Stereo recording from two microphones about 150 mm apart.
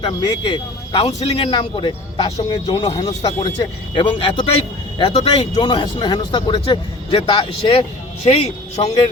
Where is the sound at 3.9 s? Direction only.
35° left (ahead or behind).